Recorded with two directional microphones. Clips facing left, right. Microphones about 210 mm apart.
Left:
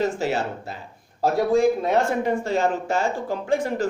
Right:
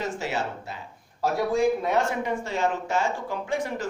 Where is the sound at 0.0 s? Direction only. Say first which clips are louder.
Left 6 dB; 35° left (ahead or behind).